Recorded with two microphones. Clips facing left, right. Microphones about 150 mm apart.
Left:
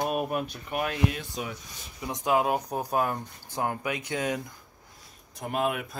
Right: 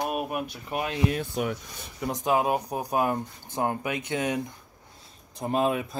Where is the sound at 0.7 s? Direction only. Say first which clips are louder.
Even; 25° right (ahead or behind).